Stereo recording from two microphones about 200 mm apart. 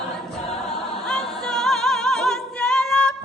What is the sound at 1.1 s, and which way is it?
Music, centre (ahead or behind).